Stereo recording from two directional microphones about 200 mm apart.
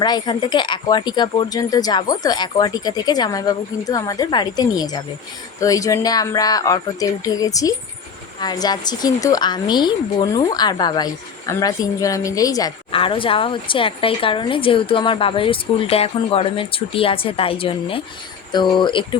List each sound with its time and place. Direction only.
0.0 s speech: 20° left (ahead or behind)